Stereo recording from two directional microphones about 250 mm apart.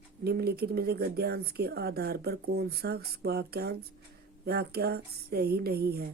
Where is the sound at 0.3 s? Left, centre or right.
Right.